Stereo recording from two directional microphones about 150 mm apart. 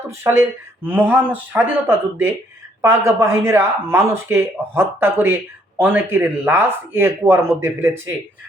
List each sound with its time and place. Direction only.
0.1 s speech: 15° right (ahead or behind)